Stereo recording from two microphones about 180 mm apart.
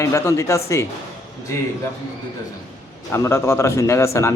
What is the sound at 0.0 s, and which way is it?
Speech, 15° left (ahead or behind).